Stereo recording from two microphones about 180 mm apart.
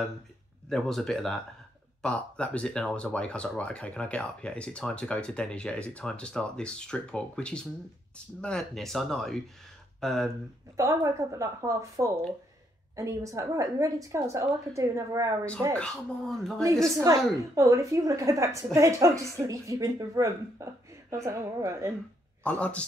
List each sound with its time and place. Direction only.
0.7 s speech: centre (ahead or behind)
10.8 s a woman's voice: 15° right (ahead or behind)
15.8 s speech: 5° left (ahead or behind)
16.9 s a woman's voice: 20° right (ahead or behind)
22.4 s speech: 5° left (ahead or behind)